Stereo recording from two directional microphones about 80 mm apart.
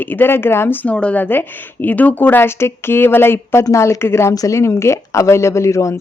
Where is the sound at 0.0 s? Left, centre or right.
Left.